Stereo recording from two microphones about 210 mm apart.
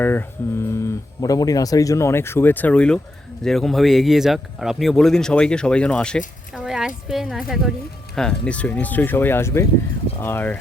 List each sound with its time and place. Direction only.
0.0 s speech: 10° left (ahead or behind)